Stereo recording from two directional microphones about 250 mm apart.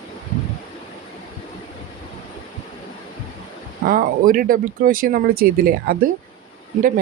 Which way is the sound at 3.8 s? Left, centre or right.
Right.